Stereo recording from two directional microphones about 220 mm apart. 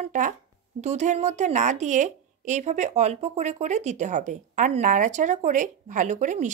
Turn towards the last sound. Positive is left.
turn(degrees=-35)  # may be behind; listen again after turning